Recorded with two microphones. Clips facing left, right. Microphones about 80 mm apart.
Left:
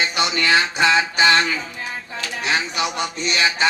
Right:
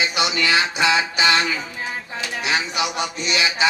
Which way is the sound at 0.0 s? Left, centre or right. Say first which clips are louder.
Even; left.